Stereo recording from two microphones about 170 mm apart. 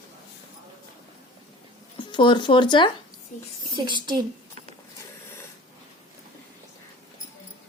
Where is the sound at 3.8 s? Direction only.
25° right (ahead or behind).